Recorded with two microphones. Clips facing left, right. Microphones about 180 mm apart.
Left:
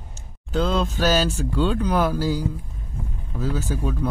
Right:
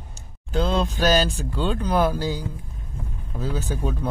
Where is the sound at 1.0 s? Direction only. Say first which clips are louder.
Right 1 dB; 10° left (ahead or behind).